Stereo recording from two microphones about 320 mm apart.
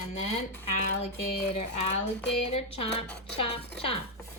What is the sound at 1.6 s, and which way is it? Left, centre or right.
Speech, centre.